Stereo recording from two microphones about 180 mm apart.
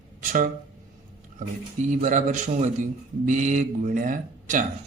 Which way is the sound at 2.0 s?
45° right (ahead or behind).